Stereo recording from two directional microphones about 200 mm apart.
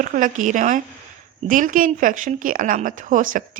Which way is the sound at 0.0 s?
40° right (ahead or behind).